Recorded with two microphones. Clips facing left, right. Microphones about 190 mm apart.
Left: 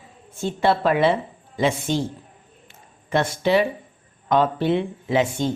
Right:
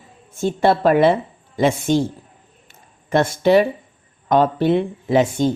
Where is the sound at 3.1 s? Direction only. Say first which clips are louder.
Right 5 dB; 45° right (ahead or behind).